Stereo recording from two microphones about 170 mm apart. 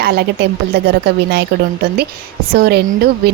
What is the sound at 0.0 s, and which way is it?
A woman's voice, 70° right (ahead or behind).